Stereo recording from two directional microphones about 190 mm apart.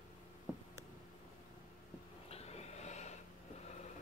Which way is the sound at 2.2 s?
35° left (ahead or behind).